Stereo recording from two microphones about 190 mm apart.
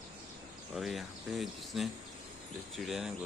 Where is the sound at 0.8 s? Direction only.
Centre (ahead or behind).